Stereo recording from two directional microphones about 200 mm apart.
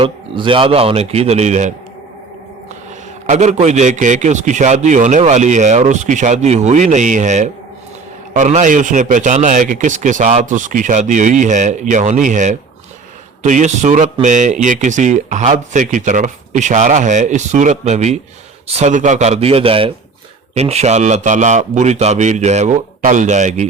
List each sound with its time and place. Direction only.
0.0 s a man's voice: 25° right (ahead or behind)
3.2 s speech: 35° right (ahead or behind)